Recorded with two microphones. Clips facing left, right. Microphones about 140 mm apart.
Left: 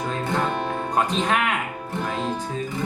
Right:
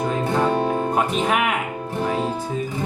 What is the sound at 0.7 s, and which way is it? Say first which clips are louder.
Music: right 3 dB; 10° right (ahead or behind).